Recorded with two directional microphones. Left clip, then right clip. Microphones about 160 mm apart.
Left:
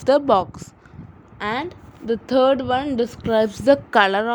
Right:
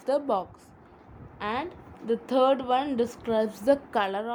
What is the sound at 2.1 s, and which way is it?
A woman's voice, 30° left (ahead or behind).